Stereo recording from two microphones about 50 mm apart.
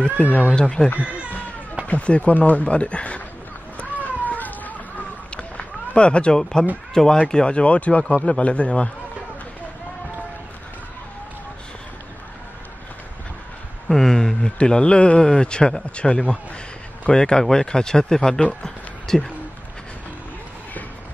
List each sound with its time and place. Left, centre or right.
0.0 s speech: left
0.8 s speech: centre
1.9 s speech: left
3.7 s cat: left
5.3 s run: left
6.9 s speech: centre
13.8 s speech: centre